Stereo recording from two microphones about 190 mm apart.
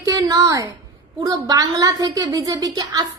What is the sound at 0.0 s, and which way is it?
A woman's voice, 20° right (ahead or behind).